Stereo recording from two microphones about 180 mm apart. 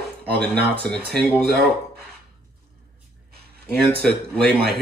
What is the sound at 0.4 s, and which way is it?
Speech, 5° left (ahead or behind).